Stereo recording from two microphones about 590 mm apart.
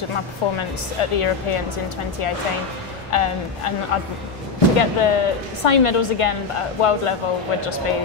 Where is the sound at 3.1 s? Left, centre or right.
Left.